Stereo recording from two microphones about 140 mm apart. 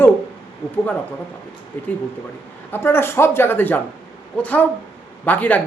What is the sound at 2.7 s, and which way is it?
A man's voice, 15° left (ahead or behind).